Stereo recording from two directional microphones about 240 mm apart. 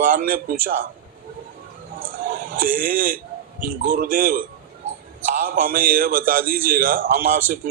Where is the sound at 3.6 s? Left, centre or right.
Right.